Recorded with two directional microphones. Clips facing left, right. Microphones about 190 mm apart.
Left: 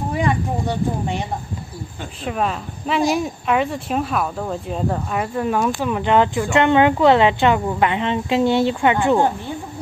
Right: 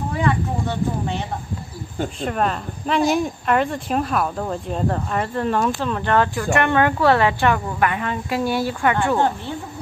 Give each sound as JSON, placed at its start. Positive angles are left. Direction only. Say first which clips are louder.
{"t": 0.1, "sound": "speech", "louder": "left 1 dB", "side_deg": 15}
{"t": 2.2, "sound": "speech", "louder": "left 1 dB", "side_deg": 0}